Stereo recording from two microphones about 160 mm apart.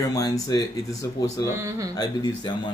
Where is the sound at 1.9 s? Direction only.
25° left (ahead or behind).